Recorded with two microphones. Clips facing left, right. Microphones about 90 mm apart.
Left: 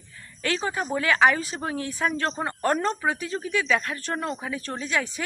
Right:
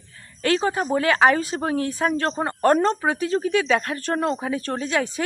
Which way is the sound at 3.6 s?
40° right (ahead or behind).